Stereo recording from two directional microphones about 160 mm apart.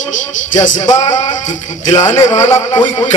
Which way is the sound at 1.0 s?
50° left (ahead or behind).